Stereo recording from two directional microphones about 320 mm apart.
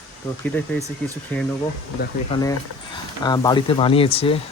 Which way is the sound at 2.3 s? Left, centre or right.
Centre.